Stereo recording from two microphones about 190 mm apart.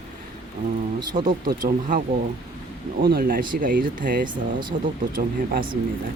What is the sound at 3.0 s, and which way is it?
Speech, 55° right (ahead or behind).